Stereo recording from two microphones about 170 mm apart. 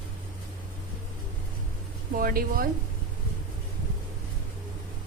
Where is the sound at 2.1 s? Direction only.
60° right (ahead or behind).